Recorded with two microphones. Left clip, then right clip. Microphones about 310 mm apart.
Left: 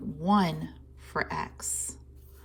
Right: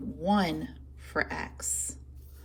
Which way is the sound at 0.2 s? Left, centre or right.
Centre.